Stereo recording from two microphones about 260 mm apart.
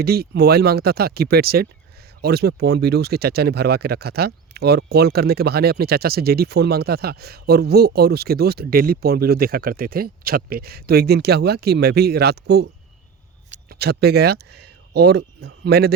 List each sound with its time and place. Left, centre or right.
0.0 s speech: right